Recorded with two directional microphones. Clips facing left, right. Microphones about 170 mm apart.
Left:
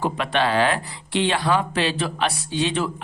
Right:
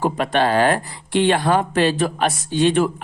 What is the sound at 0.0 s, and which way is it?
Speech, 45° right (ahead or behind).